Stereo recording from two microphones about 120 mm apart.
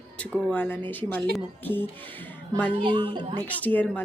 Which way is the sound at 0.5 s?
15° left (ahead or behind).